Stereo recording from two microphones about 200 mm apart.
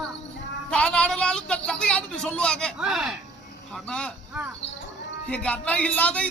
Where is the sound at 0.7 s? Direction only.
5° left (ahead or behind).